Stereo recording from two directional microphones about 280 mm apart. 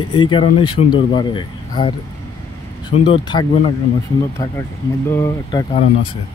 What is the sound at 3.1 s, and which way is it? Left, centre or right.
Speech, centre.